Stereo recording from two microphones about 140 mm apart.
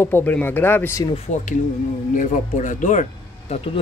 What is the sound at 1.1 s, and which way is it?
Speech, 55° left (ahead or behind).